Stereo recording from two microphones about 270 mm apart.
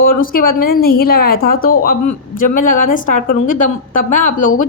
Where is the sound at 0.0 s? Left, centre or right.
Left.